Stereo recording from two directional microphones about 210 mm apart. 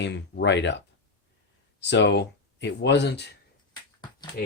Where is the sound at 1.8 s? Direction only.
55° left (ahead or behind).